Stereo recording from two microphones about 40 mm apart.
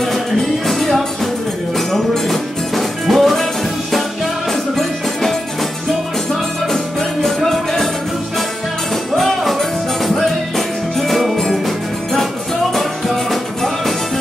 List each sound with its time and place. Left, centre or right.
0.0 s music: centre
6.7 s music: centre
9.1 s music: centre
12.7 s music: centre